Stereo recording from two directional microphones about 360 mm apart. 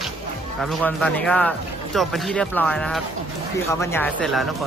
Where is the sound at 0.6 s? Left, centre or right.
Centre.